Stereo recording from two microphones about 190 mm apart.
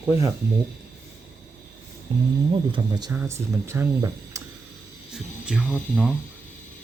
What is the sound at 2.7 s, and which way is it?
Speech, 20° right (ahead or behind).